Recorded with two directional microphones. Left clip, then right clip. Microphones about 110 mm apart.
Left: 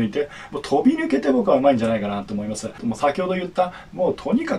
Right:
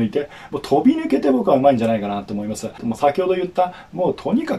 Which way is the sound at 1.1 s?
35° right (ahead or behind).